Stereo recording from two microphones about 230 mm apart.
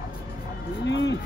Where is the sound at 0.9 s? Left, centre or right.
Left.